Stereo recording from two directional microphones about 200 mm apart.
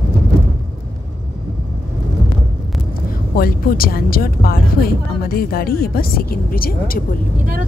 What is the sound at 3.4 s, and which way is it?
Speech, 45° left (ahead or behind).